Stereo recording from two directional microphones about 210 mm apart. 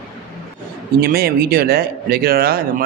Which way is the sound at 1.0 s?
45° right (ahead or behind).